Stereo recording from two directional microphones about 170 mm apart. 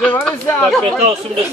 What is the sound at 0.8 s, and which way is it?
Speech, 35° right (ahead or behind).